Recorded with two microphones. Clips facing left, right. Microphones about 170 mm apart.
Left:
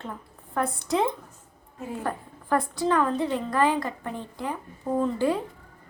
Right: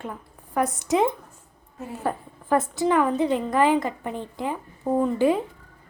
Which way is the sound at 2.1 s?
20° right (ahead or behind).